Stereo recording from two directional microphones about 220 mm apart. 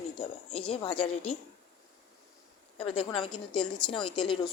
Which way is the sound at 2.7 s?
25° left (ahead or behind).